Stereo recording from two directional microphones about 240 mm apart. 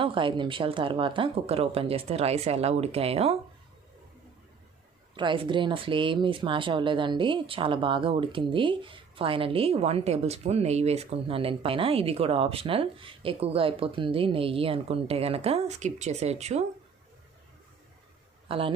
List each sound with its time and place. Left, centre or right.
0.0 s speech: right
5.1 s speech: centre
18.4 s a man's voice: right